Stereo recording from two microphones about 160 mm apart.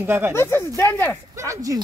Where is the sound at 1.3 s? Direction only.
20° right (ahead or behind).